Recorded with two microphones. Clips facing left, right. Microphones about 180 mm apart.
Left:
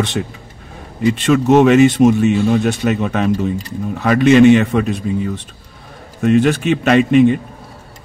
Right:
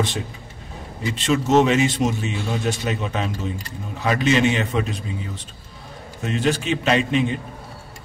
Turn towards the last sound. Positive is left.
turn(degrees=60)  # may be behind; listen again after turning